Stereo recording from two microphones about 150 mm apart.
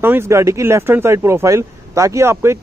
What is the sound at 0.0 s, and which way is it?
Speech, 15° right (ahead or behind).